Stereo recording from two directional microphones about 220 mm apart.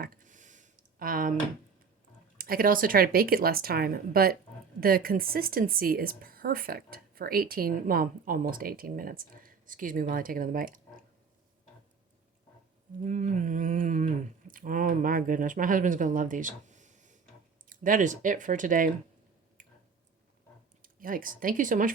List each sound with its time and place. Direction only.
0.0 s a sound: 40° right (ahead or behind)
2.4 s a woman's voice: 40° right (ahead or behind)
13.0 s a woman's voice: 35° right (ahead or behind)
20.8 s a woman's voice: 40° right (ahead or behind)